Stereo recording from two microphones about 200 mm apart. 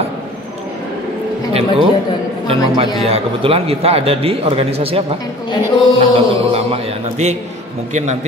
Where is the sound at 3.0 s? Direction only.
30° right (ahead or behind).